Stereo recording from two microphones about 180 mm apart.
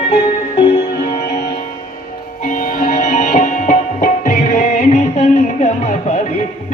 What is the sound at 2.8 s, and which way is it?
Tabla, 40° left (ahead or behind).